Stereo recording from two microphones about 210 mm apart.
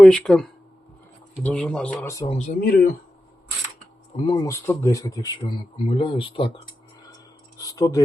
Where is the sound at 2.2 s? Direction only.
35° left (ahead or behind).